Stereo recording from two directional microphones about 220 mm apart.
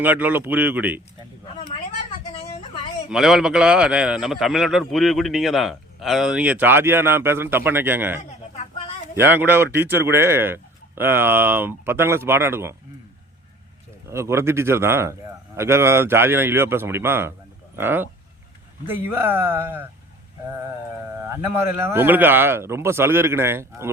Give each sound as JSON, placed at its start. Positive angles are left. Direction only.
{"t": 0.0, "sound": "speech", "side_deg": -10}
{"t": 3.1, "sound": "a man's voice", "side_deg": 0}
{"t": 9.2, "sound": "speech", "side_deg": -10}
{"t": 14.1, "sound": "speech", "side_deg": -10}
{"t": 21.2, "sound": "speech", "side_deg": -10}